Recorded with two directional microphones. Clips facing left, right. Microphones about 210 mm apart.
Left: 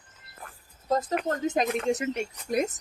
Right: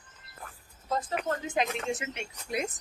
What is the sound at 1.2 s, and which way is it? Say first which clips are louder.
A woman's voice: left 3 dB; 40° left (ahead or behind).